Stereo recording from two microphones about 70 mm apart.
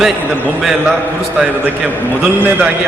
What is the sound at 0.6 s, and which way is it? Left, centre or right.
Speech, centre.